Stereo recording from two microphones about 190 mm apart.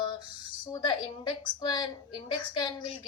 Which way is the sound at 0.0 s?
25° left (ahead or behind).